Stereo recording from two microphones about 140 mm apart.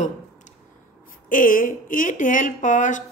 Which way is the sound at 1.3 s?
75° left (ahead or behind).